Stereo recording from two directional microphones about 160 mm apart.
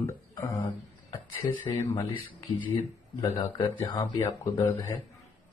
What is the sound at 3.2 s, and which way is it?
Speech, 25° left (ahead or behind).